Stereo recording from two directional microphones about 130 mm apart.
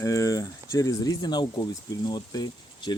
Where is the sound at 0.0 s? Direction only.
25° left (ahead or behind).